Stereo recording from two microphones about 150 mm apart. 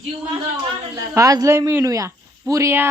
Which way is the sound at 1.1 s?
20° right (ahead or behind).